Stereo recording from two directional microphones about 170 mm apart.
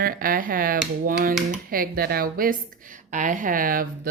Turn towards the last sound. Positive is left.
turn(degrees=-55)  # may be behind; listen again after turning